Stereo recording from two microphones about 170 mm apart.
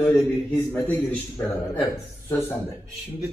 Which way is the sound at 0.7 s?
10° left (ahead or behind).